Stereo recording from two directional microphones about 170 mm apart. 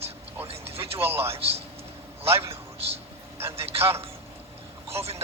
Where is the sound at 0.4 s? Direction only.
35° right (ahead or behind).